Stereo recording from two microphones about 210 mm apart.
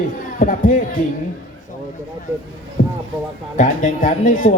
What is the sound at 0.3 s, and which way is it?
Speech, 40° left (ahead or behind).